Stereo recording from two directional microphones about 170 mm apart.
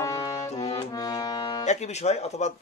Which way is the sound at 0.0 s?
20° left (ahead or behind).